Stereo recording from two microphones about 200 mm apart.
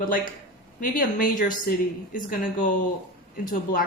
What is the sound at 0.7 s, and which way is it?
A woman's voice, 40° left (ahead or behind).